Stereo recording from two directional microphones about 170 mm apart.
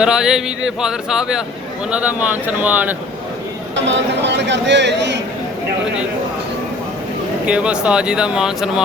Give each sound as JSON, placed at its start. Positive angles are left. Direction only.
{"t": 0.0, "sound": "speech", "side_deg": -5}
{"t": 3.8, "sound": "speech", "side_deg": -90}
{"t": 7.4, "sound": "speech", "side_deg": -5}